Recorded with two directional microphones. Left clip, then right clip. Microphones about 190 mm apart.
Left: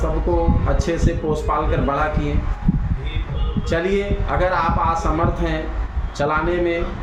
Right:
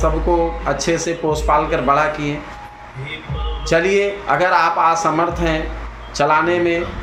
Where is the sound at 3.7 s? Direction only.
10° left (ahead or behind).